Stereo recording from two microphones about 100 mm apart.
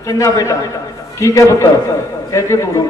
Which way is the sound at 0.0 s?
30° left (ahead or behind).